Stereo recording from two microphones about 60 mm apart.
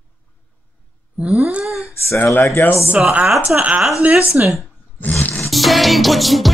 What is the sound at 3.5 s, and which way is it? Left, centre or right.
Speech, right.